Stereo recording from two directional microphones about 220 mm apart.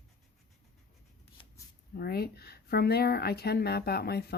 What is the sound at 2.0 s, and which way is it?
Speech, 45° left (ahead or behind).